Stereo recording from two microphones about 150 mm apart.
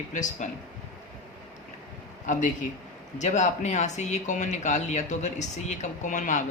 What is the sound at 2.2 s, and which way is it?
Speech, 60° left (ahead or behind).